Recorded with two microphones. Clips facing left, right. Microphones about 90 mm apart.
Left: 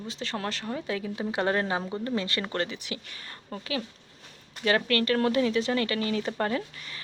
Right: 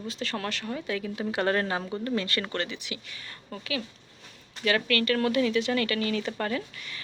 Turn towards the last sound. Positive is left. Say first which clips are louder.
# left 1 dB
turn(degrees=30)  # may be behind; listen again after turning